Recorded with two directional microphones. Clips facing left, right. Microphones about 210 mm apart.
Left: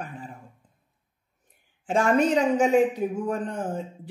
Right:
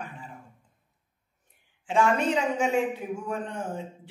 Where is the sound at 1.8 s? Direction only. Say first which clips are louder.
Left 3 dB; 40° left (ahead or behind).